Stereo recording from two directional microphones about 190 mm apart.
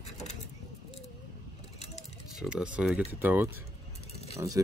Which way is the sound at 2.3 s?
5° right (ahead or behind).